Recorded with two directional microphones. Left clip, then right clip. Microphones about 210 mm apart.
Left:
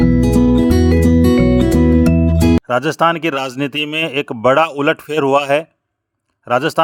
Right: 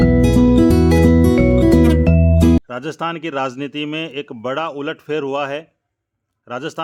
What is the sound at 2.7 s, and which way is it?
A man's voice, 35° left (ahead or behind).